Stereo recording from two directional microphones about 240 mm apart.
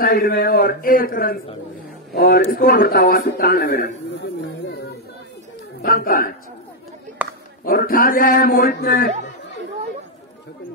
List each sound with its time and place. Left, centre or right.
0.0 s a man's voice: left
5.8 s a man's voice: left
7.2 s a sound: centre
7.6 s a man's voice: left